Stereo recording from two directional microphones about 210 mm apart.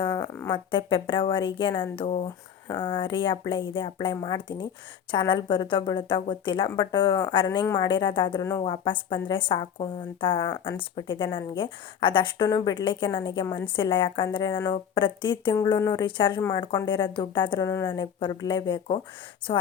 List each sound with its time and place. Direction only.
0.1 s speech: 10° left (ahead or behind)
0.5 s speech: 25° left (ahead or behind)